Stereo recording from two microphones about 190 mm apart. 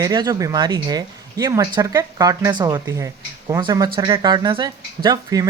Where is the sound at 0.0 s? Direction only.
20° right (ahead or behind).